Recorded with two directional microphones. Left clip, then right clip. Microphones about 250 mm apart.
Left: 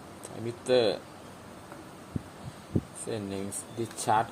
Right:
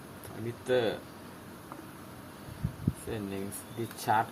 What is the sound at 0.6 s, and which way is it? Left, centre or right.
Speech, left.